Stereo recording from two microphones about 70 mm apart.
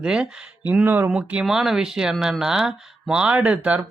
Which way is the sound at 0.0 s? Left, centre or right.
Centre.